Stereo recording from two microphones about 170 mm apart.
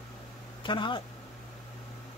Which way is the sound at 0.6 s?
30° left (ahead or behind).